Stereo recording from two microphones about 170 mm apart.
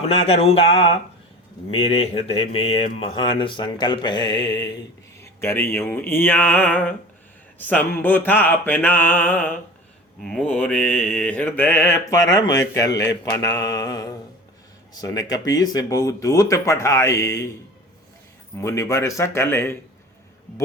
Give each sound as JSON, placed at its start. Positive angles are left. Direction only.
{"t": 0.1, "sound": "speech", "side_deg": 35}
{"t": 5.2, "sound": "mantra", "side_deg": 15}
{"t": 12.3, "sound": "speech", "side_deg": 20}
{"t": 13.3, "sound": "mantra", "side_deg": 20}
{"t": 14.9, "sound": "speech", "side_deg": 20}
{"t": 18.5, "sound": "mantra", "side_deg": 15}